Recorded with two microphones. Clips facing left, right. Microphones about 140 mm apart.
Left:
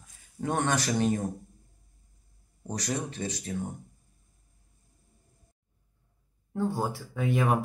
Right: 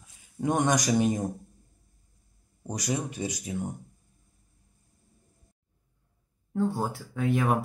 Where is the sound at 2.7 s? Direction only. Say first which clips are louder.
Right 1 dB; 10° right (ahead or behind).